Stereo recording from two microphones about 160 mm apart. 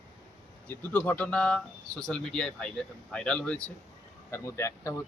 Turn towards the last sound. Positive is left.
turn(degrees=20)  # may be behind; listen again after turning